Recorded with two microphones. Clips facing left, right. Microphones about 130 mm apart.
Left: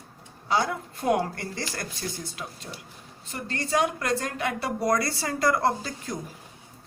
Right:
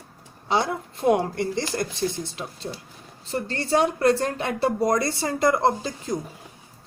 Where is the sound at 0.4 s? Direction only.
25° right (ahead or behind).